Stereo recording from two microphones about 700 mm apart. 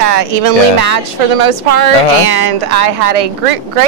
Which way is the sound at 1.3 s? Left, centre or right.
Right.